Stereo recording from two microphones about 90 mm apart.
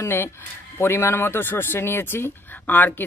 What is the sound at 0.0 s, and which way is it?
Speech, 25° left (ahead or behind).